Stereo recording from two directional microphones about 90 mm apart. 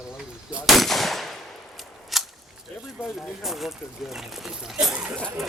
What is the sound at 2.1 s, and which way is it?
Whip, centre (ahead or behind).